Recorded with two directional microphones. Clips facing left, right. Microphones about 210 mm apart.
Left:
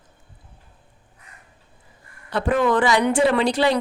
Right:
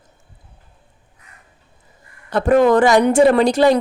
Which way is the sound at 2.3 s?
45° right (ahead or behind).